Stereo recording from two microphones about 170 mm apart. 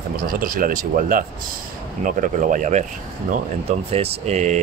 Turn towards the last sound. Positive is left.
turn(degrees=-40)  # may be behind; listen again after turning